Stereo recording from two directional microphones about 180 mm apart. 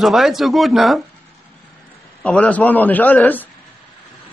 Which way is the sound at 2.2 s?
5° left (ahead or behind).